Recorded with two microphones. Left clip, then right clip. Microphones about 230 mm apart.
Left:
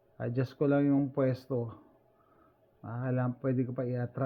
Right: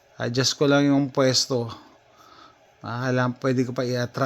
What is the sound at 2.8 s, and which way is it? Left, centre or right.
Speech, right.